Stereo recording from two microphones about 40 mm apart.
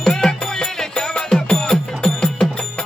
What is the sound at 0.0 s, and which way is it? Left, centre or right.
Music, centre.